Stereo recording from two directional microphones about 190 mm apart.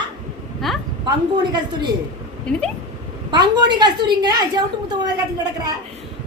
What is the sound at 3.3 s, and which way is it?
A woman's voice, 20° right (ahead or behind).